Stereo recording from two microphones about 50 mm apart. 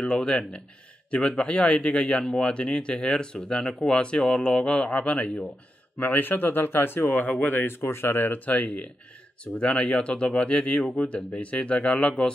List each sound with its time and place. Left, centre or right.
0.0 s a man's voice: centre
5.9 s speech: left
7.7 s speech: left
8.5 s a man's voice: left